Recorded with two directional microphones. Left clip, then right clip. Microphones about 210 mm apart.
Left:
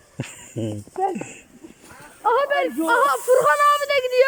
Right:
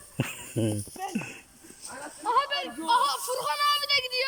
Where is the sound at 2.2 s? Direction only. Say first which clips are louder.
Left 7 dB; 25° left (ahead or behind).